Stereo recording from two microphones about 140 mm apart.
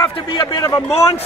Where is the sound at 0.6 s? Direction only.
25° left (ahead or behind).